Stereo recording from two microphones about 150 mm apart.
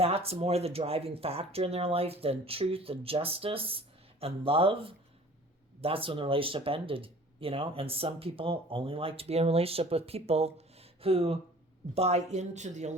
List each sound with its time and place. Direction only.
0.0 s speech: 40° right (ahead or behind)